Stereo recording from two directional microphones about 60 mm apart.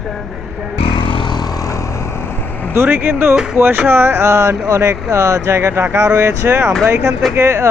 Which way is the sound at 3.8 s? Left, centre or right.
Right.